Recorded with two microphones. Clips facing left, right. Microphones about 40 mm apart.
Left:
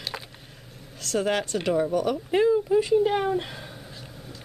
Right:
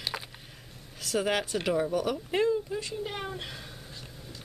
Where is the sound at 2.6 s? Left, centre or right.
Centre.